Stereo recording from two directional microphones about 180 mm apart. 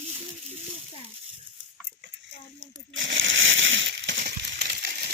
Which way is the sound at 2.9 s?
90° right.